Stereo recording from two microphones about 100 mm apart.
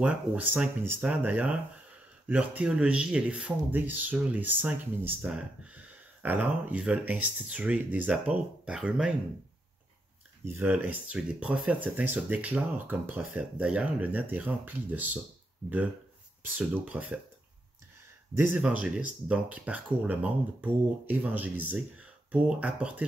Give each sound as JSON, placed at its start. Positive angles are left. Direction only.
{"t": 0.0, "sound": "speech", "side_deg": -15}
{"t": 10.4, "sound": "speech", "side_deg": -20}
{"t": 16.5, "sound": "speech", "side_deg": -15}
{"t": 18.6, "sound": "speech", "side_deg": -10}